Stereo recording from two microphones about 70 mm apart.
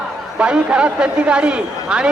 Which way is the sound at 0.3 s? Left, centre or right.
Centre.